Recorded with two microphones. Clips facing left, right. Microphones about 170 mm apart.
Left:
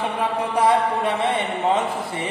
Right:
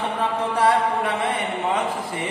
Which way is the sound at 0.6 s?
20° left (ahead or behind).